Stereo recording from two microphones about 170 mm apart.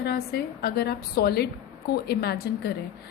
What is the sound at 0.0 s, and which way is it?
A woman's voice, 70° left (ahead or behind).